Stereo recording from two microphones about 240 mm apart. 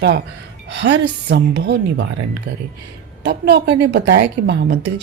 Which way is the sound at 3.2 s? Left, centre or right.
Right.